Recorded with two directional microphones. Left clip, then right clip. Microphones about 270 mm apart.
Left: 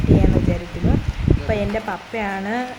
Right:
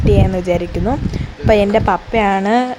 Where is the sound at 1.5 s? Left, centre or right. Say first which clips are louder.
Right 14 dB; right.